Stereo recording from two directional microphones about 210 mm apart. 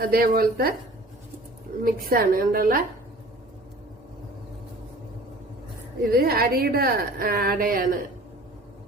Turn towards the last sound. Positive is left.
turn(degrees=-45)  # may be behind; listen again after turning